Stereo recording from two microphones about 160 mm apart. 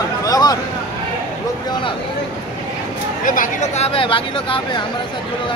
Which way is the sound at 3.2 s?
55° left (ahead or behind).